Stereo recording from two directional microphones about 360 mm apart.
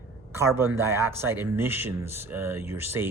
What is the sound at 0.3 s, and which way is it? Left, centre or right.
Speech, centre.